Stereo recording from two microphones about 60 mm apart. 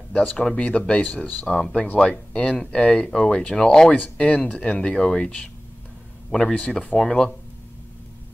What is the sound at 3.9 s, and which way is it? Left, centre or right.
Speech, left.